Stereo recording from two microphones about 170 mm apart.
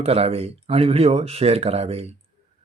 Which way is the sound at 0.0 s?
35° right (ahead or behind).